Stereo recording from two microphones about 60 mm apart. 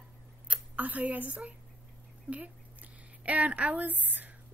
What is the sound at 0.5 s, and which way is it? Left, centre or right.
A woman's voice, right.